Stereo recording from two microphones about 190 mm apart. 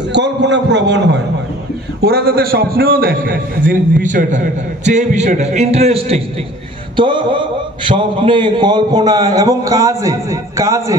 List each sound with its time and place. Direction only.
0.1 s a man's voice: 65° right (ahead or behind); by 11.0 s 15° right (ahead or behind)